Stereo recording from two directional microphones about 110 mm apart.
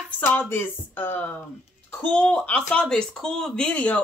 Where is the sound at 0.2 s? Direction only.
15° left (ahead or behind).